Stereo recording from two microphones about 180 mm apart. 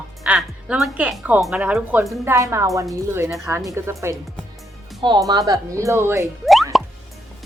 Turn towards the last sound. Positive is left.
turn(degrees=0)  # may be behind; listen again after turning